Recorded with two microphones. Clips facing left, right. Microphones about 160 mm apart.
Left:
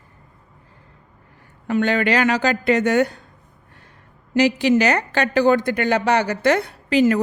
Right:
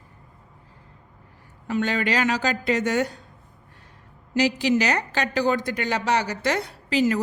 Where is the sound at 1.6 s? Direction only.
60° left (ahead or behind).